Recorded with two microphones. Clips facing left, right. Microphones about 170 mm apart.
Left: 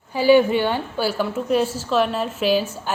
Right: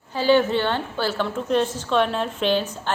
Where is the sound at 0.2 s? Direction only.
10° left (ahead or behind).